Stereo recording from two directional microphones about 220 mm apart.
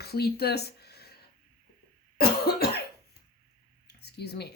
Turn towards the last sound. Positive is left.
turn(degrees=50)  # may be behind; listen again after turning